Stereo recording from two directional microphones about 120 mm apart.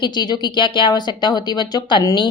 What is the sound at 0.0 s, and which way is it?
A woman's voice, 35° left (ahead or behind).